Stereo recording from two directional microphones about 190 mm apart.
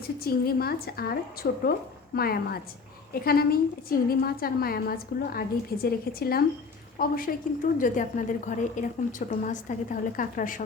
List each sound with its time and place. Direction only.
0.3 s a woman's voice: 55° left (ahead or behind)